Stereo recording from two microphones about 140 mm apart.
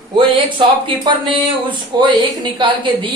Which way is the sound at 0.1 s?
35° right (ahead or behind).